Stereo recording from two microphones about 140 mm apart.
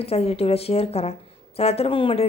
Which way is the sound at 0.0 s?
45° left (ahead or behind).